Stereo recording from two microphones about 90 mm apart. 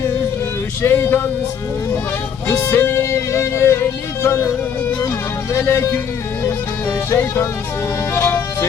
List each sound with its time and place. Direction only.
0.8 s music: 25° left (ahead or behind)
2.5 s music: 30° left (ahead or behind)
5.5 s speech: 30° left (ahead or behind)
8.1 s music: 25° left (ahead or behind)